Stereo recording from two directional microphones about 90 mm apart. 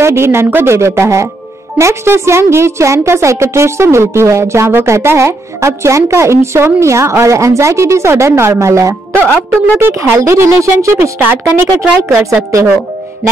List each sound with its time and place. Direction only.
0.0 s a woman's voice: 30° right (ahead or behind)
9.8 s a woman's voice: 25° right (ahead or behind)